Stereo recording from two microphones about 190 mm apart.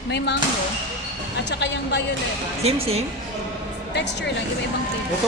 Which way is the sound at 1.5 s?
65° left (ahead or behind).